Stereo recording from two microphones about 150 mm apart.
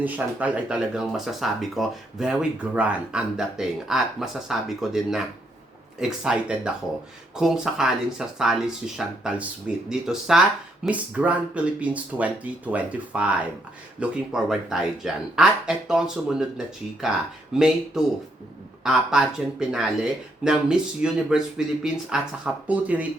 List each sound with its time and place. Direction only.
0.0 s speech: 10° right (ahead or behind)